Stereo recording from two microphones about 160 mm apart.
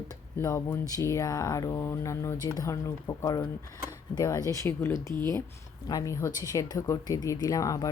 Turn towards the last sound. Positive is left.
turn(degrees=20)  # may be behind; listen again after turning